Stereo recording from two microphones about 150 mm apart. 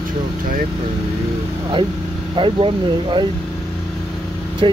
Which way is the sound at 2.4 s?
35° right (ahead or behind).